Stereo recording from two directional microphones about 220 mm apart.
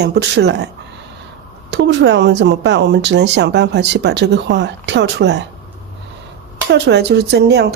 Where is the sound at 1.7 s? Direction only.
55° right (ahead or behind).